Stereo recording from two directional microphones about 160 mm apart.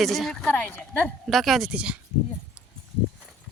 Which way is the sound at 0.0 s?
Centre (ahead or behind).